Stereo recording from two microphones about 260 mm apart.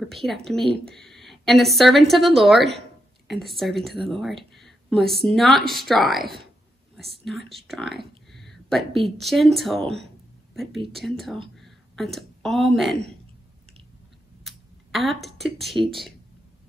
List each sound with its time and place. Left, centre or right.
0.0 s speech: centre
14.4 s a sound: centre
15.2 s speech: centre